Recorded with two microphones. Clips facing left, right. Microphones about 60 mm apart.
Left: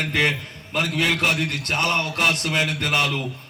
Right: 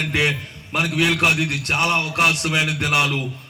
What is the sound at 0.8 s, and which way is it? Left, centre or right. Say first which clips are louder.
A man's voice: right 3 dB; left.